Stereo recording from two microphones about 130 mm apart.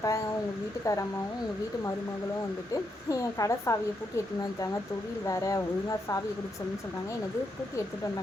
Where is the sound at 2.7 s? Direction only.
25° left (ahead or behind).